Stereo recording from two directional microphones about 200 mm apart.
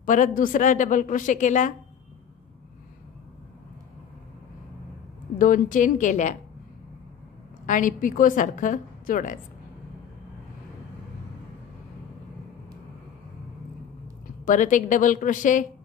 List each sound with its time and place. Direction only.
0.0 s a woman's voice: 40° left (ahead or behind)
5.4 s a woman's voice: 40° left (ahead or behind)
7.6 s a woman's voice: 40° left (ahead or behind)
14.4 s a woman's voice: 40° left (ahead or behind)